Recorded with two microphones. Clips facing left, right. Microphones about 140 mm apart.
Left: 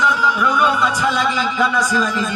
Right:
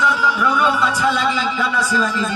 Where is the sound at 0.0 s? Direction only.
15° left (ahead or behind).